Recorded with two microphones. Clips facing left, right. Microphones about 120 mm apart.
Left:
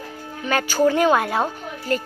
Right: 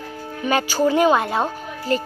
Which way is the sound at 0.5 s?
5° right (ahead or behind).